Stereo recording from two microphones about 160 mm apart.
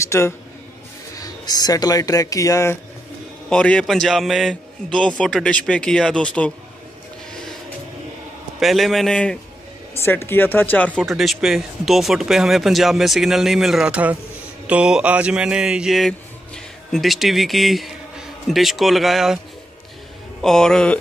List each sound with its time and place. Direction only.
0.0 s speech: 15° left (ahead or behind)
3.4 s speech: 5° left (ahead or behind)
8.5 s speech: centre (ahead or behind)
9.9 s speech: 15° left (ahead or behind); by 19.4 s centre (ahead or behind)
20.4 s speech: 5° left (ahead or behind)